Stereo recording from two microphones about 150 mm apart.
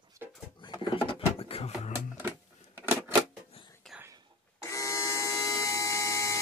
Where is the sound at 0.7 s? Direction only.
35° left (ahead or behind).